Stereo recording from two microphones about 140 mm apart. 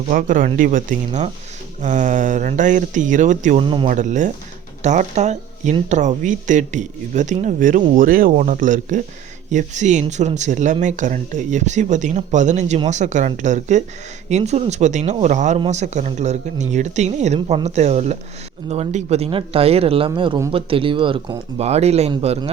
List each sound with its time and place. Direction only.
0.1 s speech: 70° right (ahead or behind)
3.6 s speech: 35° right (ahead or behind)
3.8 s speech: 60° right (ahead or behind)